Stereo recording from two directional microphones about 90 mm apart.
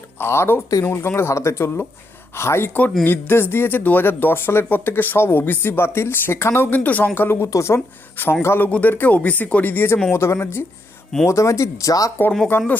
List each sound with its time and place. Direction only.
0.2 s speech: 30° left (ahead or behind)
12.5 s speech: 25° left (ahead or behind)